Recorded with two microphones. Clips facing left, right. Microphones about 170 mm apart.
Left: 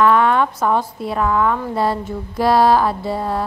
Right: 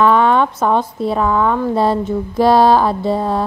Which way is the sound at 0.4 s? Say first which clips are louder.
Right 2 dB; 25° right (ahead or behind).